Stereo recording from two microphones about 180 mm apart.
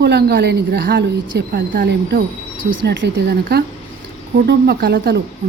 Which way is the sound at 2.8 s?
75° right (ahead or behind).